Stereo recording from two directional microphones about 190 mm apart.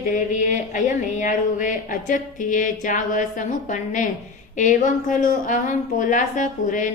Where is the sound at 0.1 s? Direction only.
40° left (ahead or behind).